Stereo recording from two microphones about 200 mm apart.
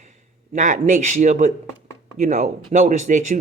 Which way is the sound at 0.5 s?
40° right (ahead or behind).